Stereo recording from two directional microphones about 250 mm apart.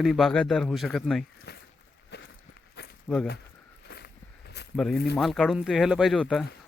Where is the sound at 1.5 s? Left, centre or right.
Left.